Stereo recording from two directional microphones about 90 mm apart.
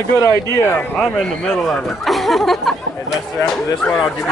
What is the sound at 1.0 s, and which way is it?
Speech, 5° left (ahead or behind).